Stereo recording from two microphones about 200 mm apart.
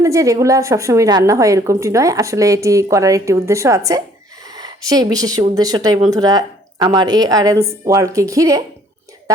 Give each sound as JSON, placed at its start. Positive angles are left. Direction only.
{"t": 0.0, "sound": "a woman's voice", "side_deg": -15}